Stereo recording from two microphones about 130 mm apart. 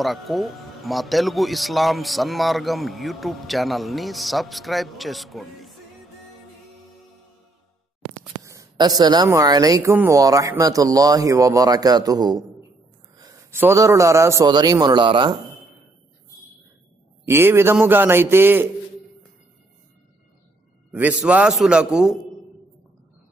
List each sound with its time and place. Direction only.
0.0 s speech: centre (ahead or behind)
8.2 s a sound: 20° right (ahead or behind)
8.7 s a woman's voice: 30° right (ahead or behind)
13.2 s a sound: 30° right (ahead or behind)
13.6 s speech: 20° right (ahead or behind)
14.5 s a woman's voice: 35° right (ahead or behind)
17.2 s a man's voice: 20° right (ahead or behind)
20.9 s a man's voice: 10° right (ahead or behind)